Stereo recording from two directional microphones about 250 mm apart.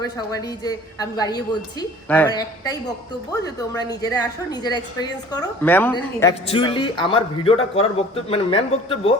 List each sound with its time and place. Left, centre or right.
0.0 s a woman's voice: centre